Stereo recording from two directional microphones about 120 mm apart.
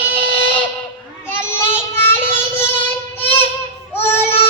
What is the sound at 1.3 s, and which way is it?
Child singing, 20° left (ahead or behind).